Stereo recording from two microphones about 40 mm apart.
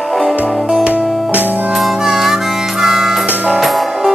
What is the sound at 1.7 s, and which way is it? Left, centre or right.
Harmonica, centre.